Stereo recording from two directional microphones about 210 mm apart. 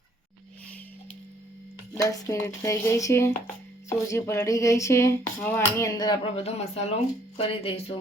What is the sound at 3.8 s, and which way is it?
Music, 15° left (ahead or behind).